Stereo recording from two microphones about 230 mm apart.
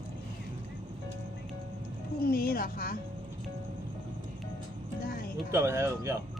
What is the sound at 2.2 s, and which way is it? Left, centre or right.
Speech, left.